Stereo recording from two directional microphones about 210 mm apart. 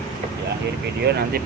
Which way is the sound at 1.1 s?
50° right (ahead or behind).